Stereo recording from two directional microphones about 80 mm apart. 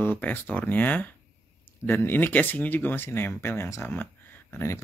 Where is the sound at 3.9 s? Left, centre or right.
Left.